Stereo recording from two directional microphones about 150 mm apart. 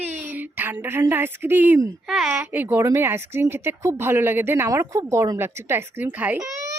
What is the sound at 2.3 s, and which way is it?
A child's voice, 15° right (ahead or behind).